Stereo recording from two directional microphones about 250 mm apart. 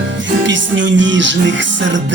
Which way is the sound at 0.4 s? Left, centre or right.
Right.